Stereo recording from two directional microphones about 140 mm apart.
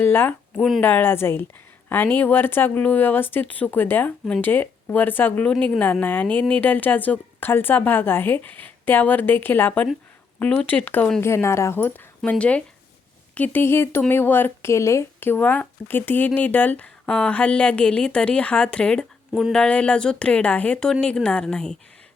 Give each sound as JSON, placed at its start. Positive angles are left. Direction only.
{"t": 0.0, "sound": "speech", "side_deg": 15}